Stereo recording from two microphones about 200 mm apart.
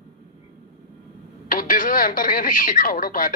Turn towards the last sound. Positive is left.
turn(degrees=45)  # may be behind; listen again after turning